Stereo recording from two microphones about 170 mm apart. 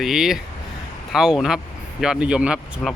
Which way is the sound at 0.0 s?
Centre (ahead or behind).